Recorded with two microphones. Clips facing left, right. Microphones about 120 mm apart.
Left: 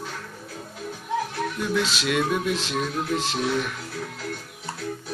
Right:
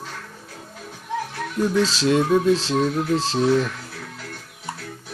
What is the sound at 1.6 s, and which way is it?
Speech, 35° right (ahead or behind).